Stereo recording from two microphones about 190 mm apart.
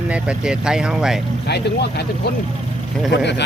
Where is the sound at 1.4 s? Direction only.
60° left (ahead or behind).